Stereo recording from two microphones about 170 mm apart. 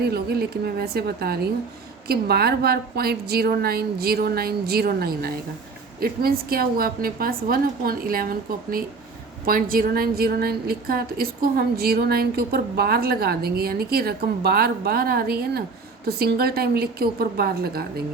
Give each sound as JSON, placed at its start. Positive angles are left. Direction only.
{"t": 0.0, "sound": "a woman's voice", "side_deg": -70}